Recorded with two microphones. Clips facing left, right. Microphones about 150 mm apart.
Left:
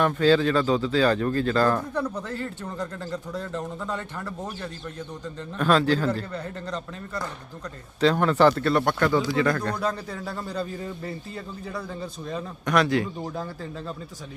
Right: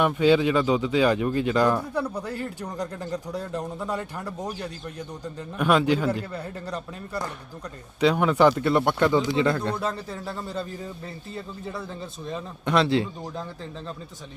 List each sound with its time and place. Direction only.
0.0 s speech: 10° right (ahead or behind)
9.8 s a man's voice: centre (ahead or behind)
12.6 s speech: 25° right (ahead or behind)